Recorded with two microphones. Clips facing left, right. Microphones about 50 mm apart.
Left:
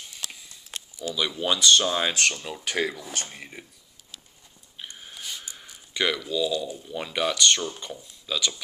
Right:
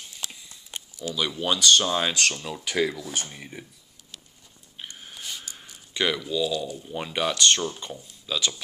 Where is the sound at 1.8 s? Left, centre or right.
Centre.